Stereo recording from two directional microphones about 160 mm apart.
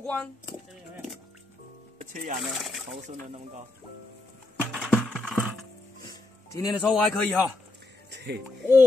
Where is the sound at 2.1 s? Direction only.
50° right (ahead or behind).